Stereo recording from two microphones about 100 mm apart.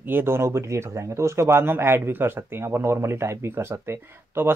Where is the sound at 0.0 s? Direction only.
20° right (ahead or behind).